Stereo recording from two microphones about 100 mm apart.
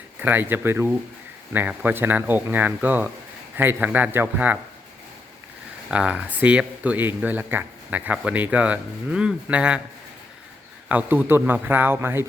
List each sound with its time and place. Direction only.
0.2 s speech: 20° right (ahead or behind)
5.9 s speech: 10° right (ahead or behind)
10.8 s speech: 15° right (ahead or behind)